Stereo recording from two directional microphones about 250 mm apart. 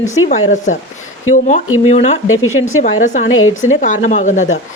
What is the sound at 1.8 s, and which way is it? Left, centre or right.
Speech, left.